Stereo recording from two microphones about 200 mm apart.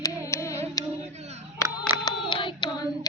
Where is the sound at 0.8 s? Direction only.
15° left (ahead or behind).